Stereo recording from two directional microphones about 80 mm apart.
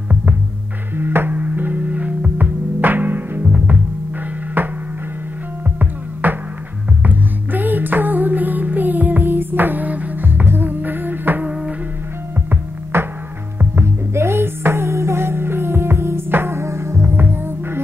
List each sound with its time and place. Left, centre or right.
0.9 s music: right
6.2 s music: right
12.9 s music: right